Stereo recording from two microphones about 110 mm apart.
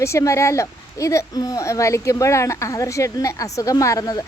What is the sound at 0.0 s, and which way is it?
Speech, 25° left (ahead or behind).